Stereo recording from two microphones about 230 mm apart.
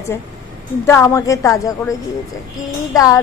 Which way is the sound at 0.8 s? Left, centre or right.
Centre.